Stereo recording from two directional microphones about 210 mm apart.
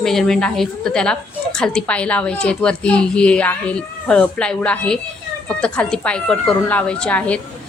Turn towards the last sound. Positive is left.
turn(degrees=5)  # may be behind; listen again after turning